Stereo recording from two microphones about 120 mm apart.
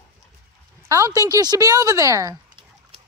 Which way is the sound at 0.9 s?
30° right (ahead or behind).